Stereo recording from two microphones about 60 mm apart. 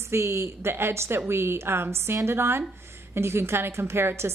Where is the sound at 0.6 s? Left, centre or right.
Right.